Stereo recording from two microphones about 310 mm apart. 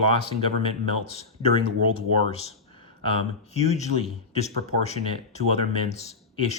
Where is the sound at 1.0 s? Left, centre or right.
Centre.